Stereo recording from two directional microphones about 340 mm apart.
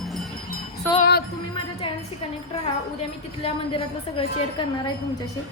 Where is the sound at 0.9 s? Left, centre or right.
Left.